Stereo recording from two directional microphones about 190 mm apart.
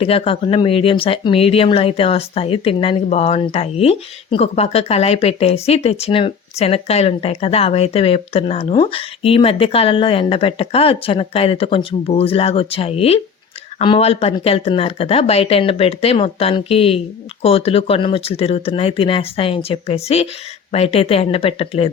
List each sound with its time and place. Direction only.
0.0 s speech: 30° left (ahead or behind)